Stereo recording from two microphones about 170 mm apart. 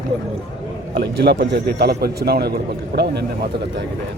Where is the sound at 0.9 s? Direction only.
70° right (ahead or behind).